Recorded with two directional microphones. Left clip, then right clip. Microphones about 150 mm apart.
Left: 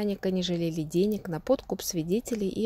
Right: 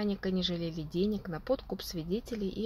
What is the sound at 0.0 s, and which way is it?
Speech, 50° left (ahead or behind).